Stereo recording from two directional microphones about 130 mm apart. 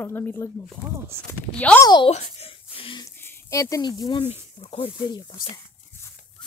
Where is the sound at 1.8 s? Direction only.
35° left (ahead or behind).